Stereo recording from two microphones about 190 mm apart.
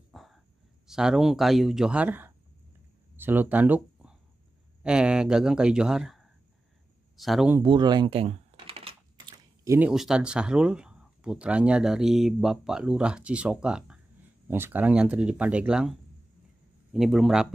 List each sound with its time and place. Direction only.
0.1 s a sound: centre (ahead or behind)
0.8 s speech: 5° right (ahead or behind)
7.6 s typing: 25° right (ahead or behind)
9.7 s speech: 5° right (ahead or behind)